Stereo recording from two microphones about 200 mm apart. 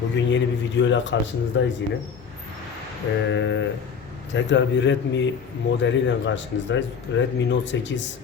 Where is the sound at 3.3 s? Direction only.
65° left (ahead or behind).